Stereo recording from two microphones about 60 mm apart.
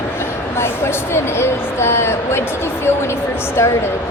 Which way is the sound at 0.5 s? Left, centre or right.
Left.